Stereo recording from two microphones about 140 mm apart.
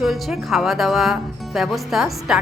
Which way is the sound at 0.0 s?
Centre (ahead or behind).